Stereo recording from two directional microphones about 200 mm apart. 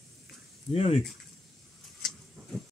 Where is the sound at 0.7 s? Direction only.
30° left (ahead or behind).